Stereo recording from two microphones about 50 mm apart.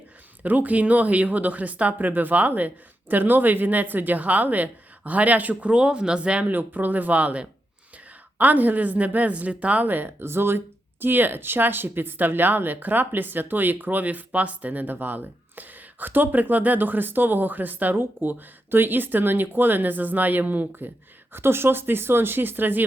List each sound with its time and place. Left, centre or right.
0.4 s speech: right
6.5 s speech: right
11.0 s speech: right
21.3 s speech: right